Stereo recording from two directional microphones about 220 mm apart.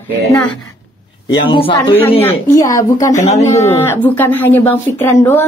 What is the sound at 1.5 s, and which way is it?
Speech, 20° left (ahead or behind).